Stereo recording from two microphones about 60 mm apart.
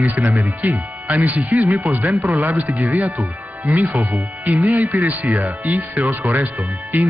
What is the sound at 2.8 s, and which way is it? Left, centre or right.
Speech, right.